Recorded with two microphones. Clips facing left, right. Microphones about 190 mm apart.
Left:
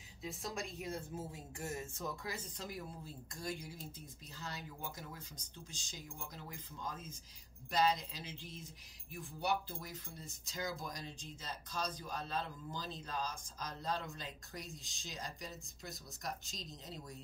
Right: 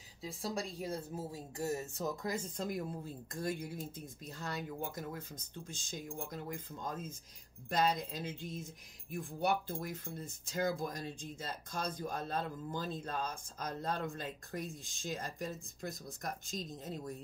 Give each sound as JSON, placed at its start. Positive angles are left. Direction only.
{"t": 0.2, "sound": "speech", "side_deg": -30}